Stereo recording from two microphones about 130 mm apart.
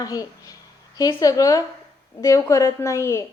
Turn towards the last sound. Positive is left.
turn(degrees=20)  # may be behind; listen again after turning